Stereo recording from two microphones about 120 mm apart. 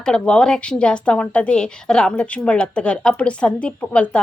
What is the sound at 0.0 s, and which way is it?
Speech, 5° left (ahead or behind).